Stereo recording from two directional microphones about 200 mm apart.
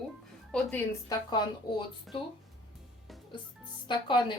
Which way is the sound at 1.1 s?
20° left (ahead or behind).